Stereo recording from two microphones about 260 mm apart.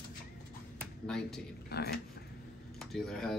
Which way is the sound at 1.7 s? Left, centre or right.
Left.